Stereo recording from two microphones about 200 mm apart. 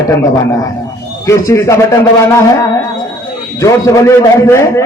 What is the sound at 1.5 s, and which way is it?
Speech, 15° left (ahead or behind).